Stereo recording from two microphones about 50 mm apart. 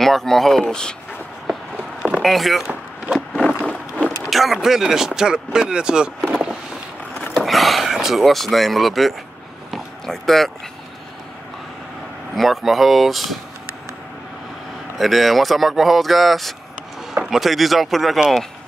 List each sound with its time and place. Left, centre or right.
0.0 s speech: centre
2.2 s speech: centre
3.6 s a sound: left
4.3 s speech: centre
7.3 s speech: centre
9.7 s a sound: centre
12.4 s speech: centre
15.0 s speech: centre